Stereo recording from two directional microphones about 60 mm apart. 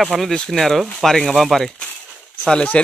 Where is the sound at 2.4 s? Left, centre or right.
Centre.